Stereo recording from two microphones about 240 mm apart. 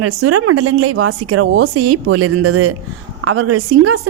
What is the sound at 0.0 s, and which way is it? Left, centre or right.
A woman's voice, right.